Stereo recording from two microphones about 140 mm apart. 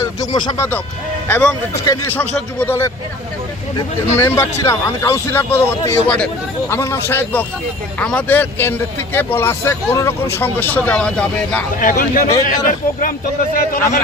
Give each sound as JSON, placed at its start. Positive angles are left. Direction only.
{"t": 0.0, "sound": "a sound", "side_deg": 30}
{"t": 1.3, "sound": "speech", "side_deg": 5}
{"t": 1.8, "sound": "speech", "side_deg": 20}
{"t": 4.2, "sound": "speech", "side_deg": 15}
{"t": 11.8, "sound": "a man's voice", "side_deg": 75}
{"t": 12.6, "sound": "speech", "side_deg": 85}